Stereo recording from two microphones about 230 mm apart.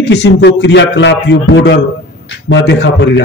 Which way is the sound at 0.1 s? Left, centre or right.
Left.